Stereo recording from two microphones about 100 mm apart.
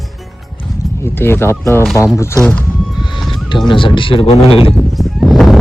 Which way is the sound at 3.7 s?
60° left (ahead or behind).